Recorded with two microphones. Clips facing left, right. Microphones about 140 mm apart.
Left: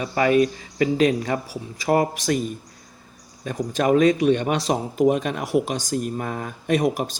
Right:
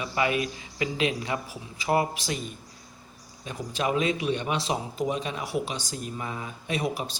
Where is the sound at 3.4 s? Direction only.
45° left (ahead or behind).